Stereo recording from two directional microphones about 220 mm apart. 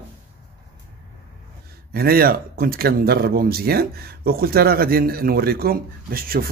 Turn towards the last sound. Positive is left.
turn(degrees=-40)  # may be behind; listen again after turning